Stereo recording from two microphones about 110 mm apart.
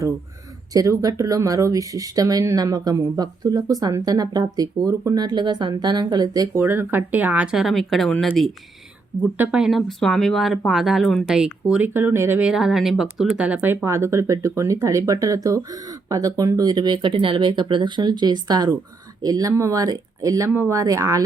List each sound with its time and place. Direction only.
0.7 s speech: 35° right (ahead or behind)
6.6 s speech: 20° right (ahead or behind); by 8.5 s 5° left (ahead or behind)
9.4 s speech: 5° right (ahead or behind)
11.9 s speech: 20° right (ahead or behind)
12.4 s speech: 5° right (ahead or behind); by 21.2 s 30° right (ahead or behind)